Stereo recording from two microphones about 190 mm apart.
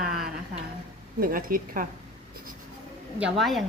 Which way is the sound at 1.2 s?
50° right (ahead or behind).